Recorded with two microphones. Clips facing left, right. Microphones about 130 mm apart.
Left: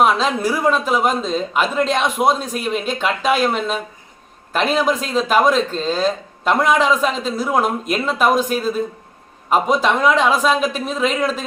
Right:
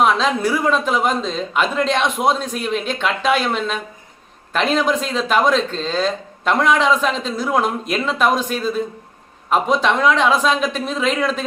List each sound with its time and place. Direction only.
0.0 s speech: 5° left (ahead or behind)